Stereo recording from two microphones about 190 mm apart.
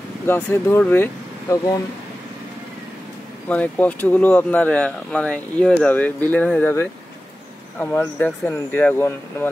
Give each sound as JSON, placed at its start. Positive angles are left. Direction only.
{"t": 0.3, "sound": "speech", "side_deg": 10}
{"t": 3.4, "sound": "speech", "side_deg": 5}